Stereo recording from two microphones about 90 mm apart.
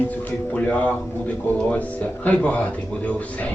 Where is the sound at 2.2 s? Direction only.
15° left (ahead or behind).